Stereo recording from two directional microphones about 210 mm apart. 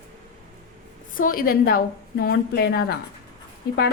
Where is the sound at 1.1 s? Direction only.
40° left (ahead or behind).